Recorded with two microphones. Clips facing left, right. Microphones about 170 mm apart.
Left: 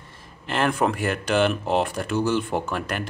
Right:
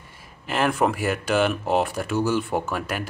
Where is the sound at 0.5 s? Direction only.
Centre (ahead or behind).